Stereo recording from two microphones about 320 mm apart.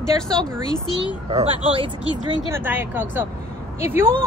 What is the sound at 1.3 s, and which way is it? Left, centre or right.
Speech, centre.